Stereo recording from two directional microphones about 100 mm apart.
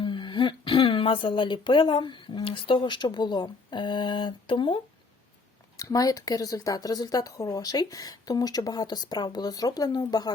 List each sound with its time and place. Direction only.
0.0 s speech: 55° left (ahead or behind)
5.7 s a woman's voice: 35° left (ahead or behind)